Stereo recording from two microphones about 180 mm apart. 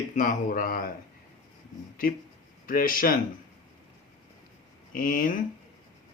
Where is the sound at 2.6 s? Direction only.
50° left (ahead or behind).